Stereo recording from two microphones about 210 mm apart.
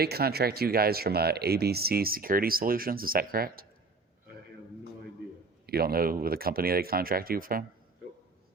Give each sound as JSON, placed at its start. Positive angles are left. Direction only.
{"t": 0.0, "sound": "speech", "side_deg": -50}
{"t": 5.6, "sound": "speech", "side_deg": -45}